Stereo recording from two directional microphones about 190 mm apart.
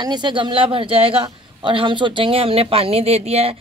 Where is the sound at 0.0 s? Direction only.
20° right (ahead or behind).